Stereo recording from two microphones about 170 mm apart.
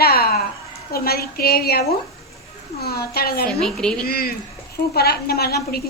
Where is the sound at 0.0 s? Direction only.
65° left (ahead or behind).